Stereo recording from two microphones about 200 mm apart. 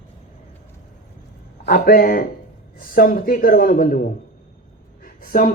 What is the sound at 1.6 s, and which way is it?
A man's voice, 45° left (ahead or behind).